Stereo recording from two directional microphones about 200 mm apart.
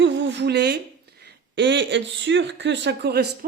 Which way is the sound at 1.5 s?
60° right (ahead or behind).